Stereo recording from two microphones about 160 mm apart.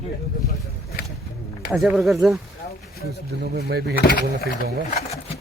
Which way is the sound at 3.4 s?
85° right.